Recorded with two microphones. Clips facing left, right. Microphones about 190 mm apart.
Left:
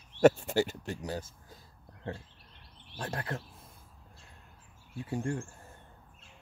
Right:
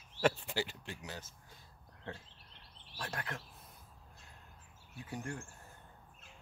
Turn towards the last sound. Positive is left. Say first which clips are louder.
# left 9 dB
turn(degrees=30)  # may be behind; listen again after turning